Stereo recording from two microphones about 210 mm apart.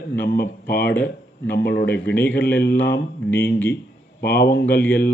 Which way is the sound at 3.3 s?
10° left (ahead or behind).